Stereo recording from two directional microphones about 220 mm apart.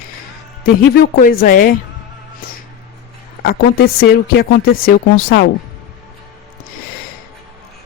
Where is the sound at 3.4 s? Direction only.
45° left (ahead or behind).